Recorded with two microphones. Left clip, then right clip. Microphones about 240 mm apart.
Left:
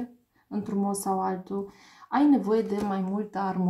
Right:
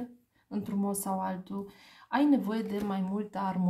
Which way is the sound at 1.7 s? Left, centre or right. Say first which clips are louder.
Left 3 dB; right.